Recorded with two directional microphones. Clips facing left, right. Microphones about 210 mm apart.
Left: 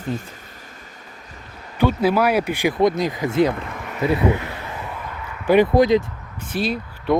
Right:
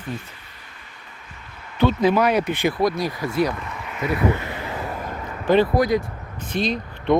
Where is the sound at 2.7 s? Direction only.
20° left (ahead or behind).